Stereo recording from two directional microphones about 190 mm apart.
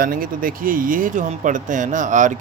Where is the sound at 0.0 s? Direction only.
50° right (ahead or behind).